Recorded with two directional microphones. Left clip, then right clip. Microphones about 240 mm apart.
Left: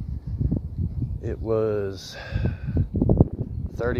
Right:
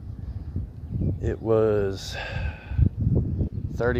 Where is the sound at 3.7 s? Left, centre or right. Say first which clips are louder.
Right 2 dB; centre.